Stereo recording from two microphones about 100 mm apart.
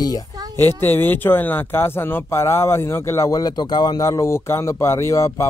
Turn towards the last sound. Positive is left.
turn(degrees=30)  # may be behind; listen again after turning